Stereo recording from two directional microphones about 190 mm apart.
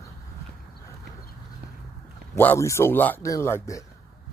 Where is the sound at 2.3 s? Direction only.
15° left (ahead or behind).